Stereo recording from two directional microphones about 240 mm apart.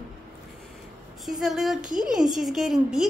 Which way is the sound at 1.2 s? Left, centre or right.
Centre.